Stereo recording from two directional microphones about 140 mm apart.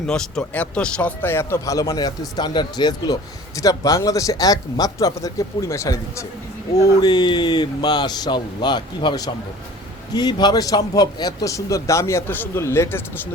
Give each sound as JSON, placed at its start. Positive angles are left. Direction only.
{"t": 0.1, "sound": "speech", "side_deg": 10}
{"t": 6.7, "sound": "speech", "side_deg": 30}